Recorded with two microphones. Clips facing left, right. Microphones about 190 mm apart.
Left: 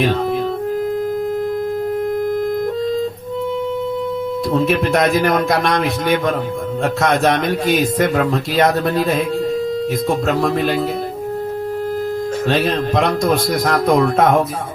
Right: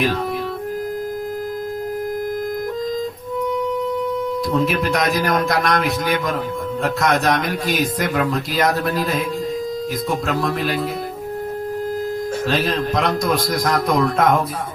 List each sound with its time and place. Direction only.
4.6 s a man's voice: 25° left (ahead or behind)
12.5 s a man's voice: 25° left (ahead or behind)